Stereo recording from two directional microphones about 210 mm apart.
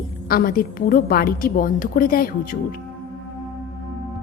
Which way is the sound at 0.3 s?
45° left (ahead or behind).